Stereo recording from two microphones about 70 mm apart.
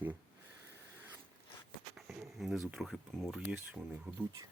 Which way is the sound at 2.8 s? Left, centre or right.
Centre.